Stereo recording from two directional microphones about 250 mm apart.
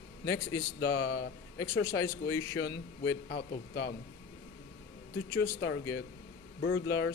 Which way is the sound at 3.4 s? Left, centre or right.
Left.